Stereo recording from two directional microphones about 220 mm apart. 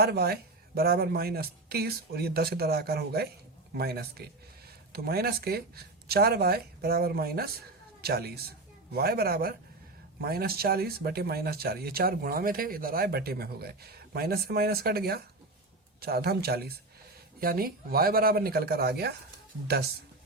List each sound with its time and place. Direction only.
0.0 s speech: 45° right (ahead or behind)